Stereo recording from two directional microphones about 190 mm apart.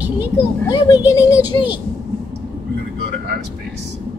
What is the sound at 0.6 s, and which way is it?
Speech, 20° left (ahead or behind).